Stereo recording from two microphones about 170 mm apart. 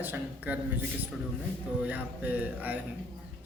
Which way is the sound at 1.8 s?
10° right (ahead or behind).